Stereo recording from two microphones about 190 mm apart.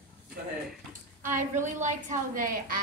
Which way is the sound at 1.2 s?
40° right (ahead or behind).